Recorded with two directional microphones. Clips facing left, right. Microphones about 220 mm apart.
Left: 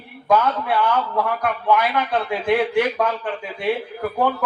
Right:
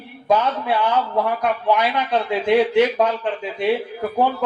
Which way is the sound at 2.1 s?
20° right (ahead or behind).